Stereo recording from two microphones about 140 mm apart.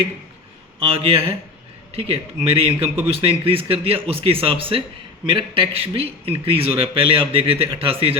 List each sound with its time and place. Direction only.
0.8 s a man's voice: 45° right (ahead or behind)